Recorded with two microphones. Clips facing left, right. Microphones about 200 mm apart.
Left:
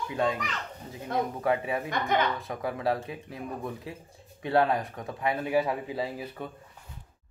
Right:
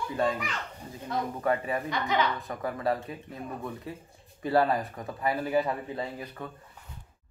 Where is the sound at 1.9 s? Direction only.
50° left (ahead or behind).